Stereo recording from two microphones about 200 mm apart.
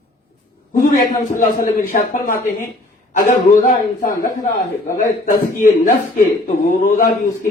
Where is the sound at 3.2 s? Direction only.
40° left (ahead or behind).